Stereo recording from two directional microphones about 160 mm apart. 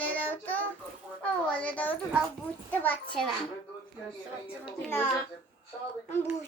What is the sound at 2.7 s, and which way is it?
Speech, 10° left (ahead or behind).